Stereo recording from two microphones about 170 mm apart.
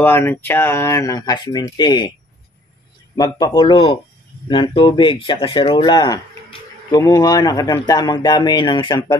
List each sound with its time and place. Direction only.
0.0 s speech: 10° left (ahead or behind); by 2.1 s 25° left (ahead or behind)
3.2 s speech: 20° left (ahead or behind)